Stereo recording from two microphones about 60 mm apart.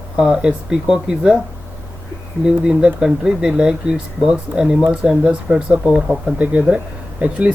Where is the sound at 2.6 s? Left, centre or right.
Centre.